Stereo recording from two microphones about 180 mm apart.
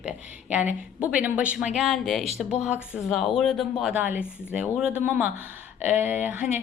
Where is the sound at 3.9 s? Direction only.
10° right (ahead or behind).